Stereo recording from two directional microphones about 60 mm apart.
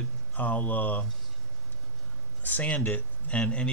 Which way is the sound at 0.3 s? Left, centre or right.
Left.